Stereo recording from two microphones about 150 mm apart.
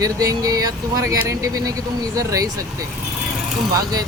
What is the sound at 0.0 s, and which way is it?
Speech, 25° right (ahead or behind).